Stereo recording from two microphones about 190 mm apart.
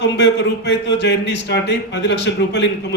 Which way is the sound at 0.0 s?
65° left (ahead or behind).